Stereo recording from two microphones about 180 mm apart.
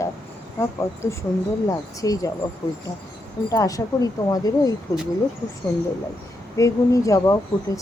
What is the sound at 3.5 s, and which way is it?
A woman's voice, 20° left (ahead or behind).